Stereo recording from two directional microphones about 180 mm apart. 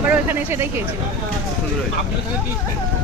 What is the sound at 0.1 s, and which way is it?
Speech, 15° right (ahead or behind).